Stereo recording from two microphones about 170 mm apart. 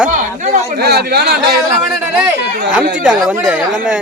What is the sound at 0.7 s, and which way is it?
Speech, 70° right (ahead or behind).